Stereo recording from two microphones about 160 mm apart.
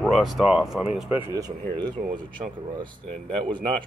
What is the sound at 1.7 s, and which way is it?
Speech, 30° right (ahead or behind).